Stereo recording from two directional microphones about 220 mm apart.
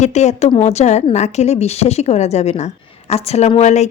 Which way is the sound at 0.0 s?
30° left (ahead or behind).